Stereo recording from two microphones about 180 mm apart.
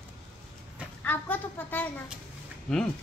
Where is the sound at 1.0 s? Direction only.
10° left (ahead or behind).